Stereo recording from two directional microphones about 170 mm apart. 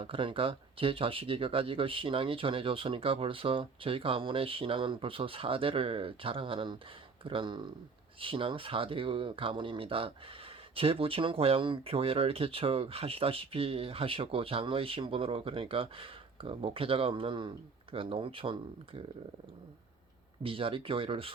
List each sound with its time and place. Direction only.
0.0 s speech: 30° right (ahead or behind)
20.4 s speech: 30° right (ahead or behind)